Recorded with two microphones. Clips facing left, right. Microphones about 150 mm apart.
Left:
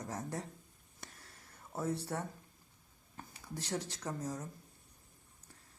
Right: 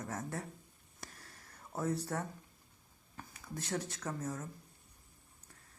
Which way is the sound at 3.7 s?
10° left (ahead or behind).